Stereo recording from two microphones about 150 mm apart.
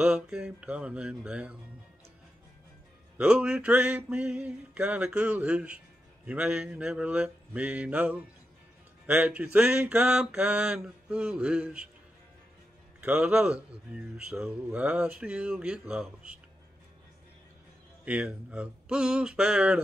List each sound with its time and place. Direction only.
0.0 s speech: 5° right (ahead or behind)
3.2 s speech: 5° right (ahead or behind)
13.0 s speech: 5° right (ahead or behind)
18.0 s speech: 10° right (ahead or behind)